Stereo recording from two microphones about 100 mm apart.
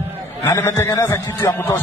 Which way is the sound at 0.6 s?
25° left (ahead or behind).